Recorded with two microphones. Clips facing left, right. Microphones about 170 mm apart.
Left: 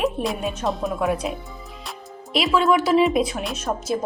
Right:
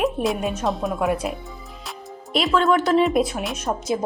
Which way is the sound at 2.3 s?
5° left (ahead or behind).